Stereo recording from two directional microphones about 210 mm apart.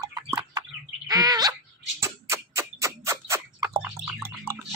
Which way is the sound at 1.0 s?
20° right (ahead or behind).